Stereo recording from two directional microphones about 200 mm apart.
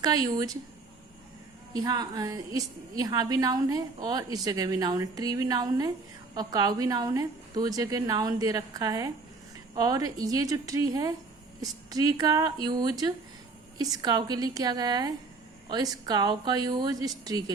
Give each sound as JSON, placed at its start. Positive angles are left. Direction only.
{"t": 0.0, "sound": "a woman's voice", "side_deg": -20}
{"t": 1.7, "sound": "a woman's voice", "side_deg": -20}